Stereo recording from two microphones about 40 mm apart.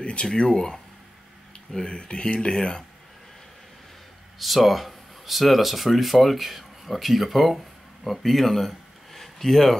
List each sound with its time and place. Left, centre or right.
0.0 s speech: left
4.4 s speech: centre